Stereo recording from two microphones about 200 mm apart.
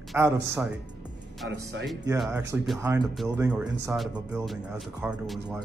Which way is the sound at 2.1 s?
Centre (ahead or behind).